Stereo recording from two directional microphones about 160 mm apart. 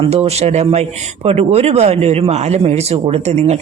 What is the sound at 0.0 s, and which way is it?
Speech, 40° right (ahead or behind).